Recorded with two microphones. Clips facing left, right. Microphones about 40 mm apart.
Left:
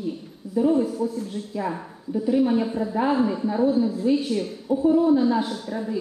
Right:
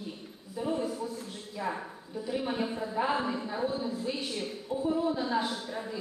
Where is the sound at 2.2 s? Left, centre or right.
Centre.